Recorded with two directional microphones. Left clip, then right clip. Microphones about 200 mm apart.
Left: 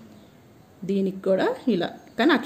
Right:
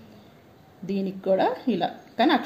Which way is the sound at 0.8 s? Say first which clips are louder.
Left 2 dB; 50° left (ahead or behind).